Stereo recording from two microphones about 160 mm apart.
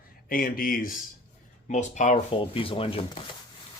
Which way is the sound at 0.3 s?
65° left (ahead or behind).